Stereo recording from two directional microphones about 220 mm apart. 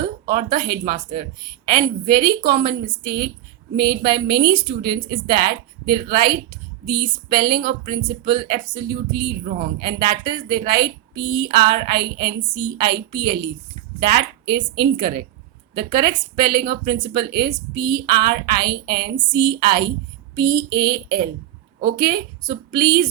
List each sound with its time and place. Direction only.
0.7 s speech: 45° right (ahead or behind)
20.4 s a sound: 15° right (ahead or behind)
20.7 s a woman's voice: 45° right (ahead or behind)